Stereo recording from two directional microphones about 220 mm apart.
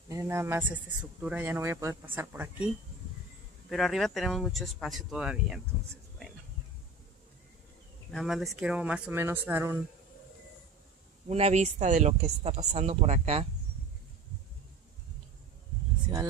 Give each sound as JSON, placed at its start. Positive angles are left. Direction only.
{"t": 0.1, "sound": "speech", "side_deg": -15}
{"t": 8.1, "sound": "speech", "side_deg": 0}
{"t": 11.2, "sound": "speech", "side_deg": -30}